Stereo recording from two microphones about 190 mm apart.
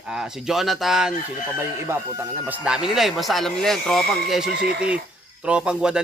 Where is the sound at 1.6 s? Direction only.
15° right (ahead or behind).